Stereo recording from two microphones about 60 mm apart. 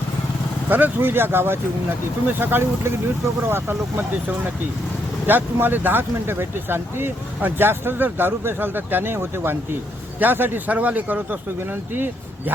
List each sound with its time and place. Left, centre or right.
0.7 s speech: right
5.2 s speech: right